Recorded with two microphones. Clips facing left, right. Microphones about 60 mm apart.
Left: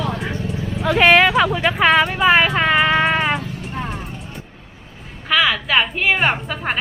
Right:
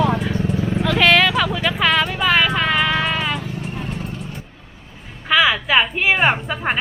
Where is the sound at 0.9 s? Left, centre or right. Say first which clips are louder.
Left 3 dB; centre.